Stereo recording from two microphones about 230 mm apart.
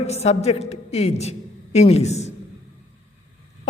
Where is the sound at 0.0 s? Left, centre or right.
Left.